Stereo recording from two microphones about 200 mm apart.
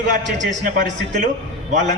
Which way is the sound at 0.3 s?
40° right (ahead or behind).